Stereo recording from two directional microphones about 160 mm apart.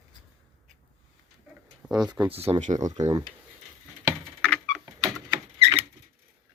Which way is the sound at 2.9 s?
25° right (ahead or behind).